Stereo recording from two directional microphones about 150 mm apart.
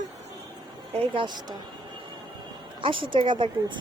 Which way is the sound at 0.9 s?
30° right (ahead or behind).